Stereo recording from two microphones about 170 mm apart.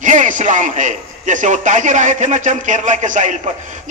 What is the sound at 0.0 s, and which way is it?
A man's voice, 45° right (ahead or behind).